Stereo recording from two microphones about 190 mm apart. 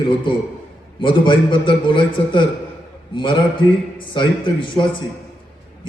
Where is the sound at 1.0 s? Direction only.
25° left (ahead or behind).